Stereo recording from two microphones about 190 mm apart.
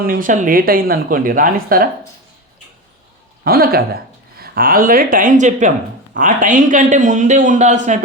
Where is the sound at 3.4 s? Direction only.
55° right (ahead or behind).